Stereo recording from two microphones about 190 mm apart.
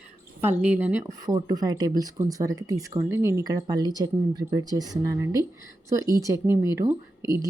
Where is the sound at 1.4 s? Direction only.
20° right (ahead or behind).